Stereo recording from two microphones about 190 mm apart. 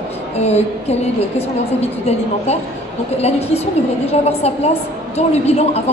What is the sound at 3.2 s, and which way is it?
A woman's voice, 35° left (ahead or behind).